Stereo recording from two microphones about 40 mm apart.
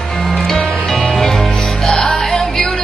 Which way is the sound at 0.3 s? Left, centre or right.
Centre.